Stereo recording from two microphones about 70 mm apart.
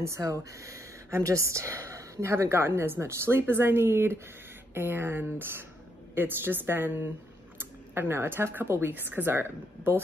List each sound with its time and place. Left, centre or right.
0.0 s speech: right